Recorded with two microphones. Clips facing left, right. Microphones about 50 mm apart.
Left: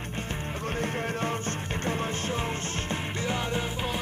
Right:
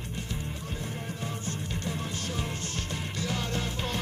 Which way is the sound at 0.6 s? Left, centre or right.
Left.